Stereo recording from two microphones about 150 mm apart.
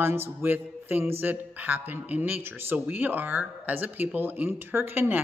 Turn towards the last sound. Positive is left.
turn(degrees=-15)  # may be behind; listen again after turning